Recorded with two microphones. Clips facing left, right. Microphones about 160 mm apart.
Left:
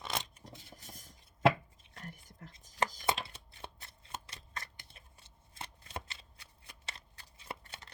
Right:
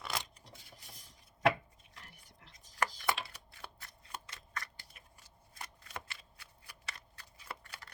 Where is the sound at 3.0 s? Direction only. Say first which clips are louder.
Left 2 dB; 25° left (ahead or behind).